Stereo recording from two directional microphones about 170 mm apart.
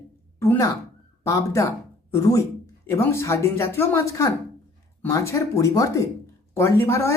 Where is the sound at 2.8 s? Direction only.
15° left (ahead or behind).